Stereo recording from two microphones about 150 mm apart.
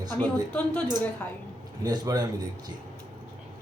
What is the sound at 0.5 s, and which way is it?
Speech, 10° left (ahead or behind).